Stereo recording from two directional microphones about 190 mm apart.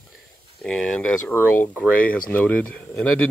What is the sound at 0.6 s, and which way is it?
Speech, 5° left (ahead or behind).